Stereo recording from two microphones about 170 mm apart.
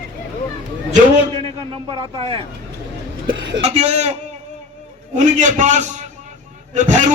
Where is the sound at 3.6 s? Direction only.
40° right (ahead or behind).